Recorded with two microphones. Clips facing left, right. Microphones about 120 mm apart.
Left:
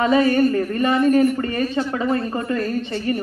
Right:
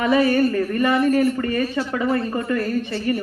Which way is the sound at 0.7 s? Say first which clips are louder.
Left 1 dB; 25° left (ahead or behind).